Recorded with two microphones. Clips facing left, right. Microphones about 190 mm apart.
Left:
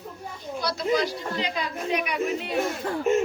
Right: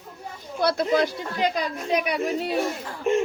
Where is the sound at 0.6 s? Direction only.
55° right (ahead or behind); by 2.6 s 35° right (ahead or behind).